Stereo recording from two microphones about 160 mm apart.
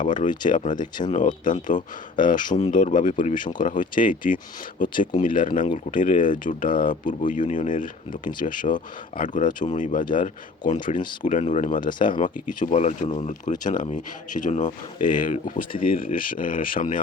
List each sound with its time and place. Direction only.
0.0 s speech: 55° left (ahead or behind)
0.8 s speech: 30° left (ahead or behind)
1.5 s speech: 55° left (ahead or behind)